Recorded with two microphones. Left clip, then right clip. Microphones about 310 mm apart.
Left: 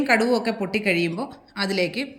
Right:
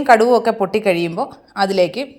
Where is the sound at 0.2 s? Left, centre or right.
Centre.